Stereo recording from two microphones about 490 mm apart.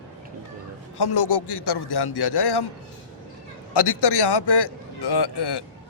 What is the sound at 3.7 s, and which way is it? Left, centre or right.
Speech, left.